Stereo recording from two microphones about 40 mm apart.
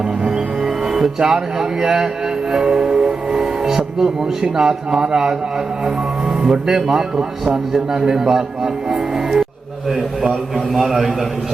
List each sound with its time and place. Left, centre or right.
0.3 s music: centre
1.2 s a man's voice: centre
3.0 s train: centre
4.5 s a man's voice: centre
6.4 s a man's voice: centre
10.8 s a man's voice: centre